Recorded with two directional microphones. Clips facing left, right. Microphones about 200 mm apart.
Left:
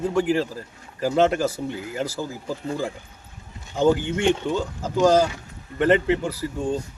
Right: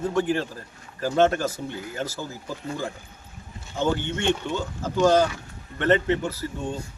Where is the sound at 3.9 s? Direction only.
Centre (ahead or behind).